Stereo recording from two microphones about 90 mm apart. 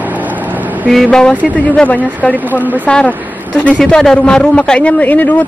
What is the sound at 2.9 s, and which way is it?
A woman's voice, 10° left (ahead or behind).